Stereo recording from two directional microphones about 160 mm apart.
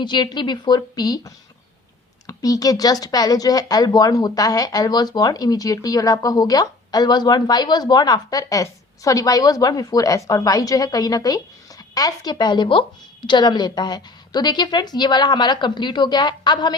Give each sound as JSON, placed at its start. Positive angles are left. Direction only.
{"t": 0.0, "sound": "speech", "side_deg": 30}